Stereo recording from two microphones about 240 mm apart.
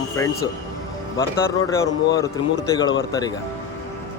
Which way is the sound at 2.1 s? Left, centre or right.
Centre.